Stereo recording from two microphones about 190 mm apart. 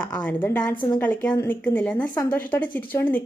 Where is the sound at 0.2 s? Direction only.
10° left (ahead or behind).